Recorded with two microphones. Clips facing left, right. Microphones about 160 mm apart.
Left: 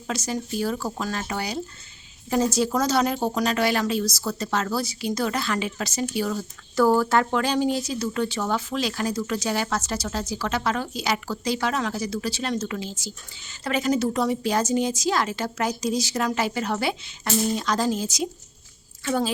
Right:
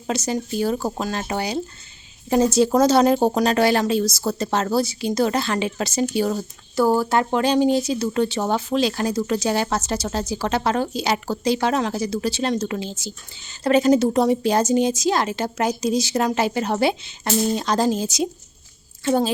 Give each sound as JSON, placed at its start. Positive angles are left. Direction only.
{"t": 0.1, "sound": "speech", "side_deg": -25}
{"t": 6.7, "sound": "speech", "side_deg": -10}